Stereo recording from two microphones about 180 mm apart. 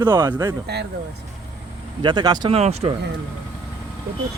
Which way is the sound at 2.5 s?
35° right (ahead or behind).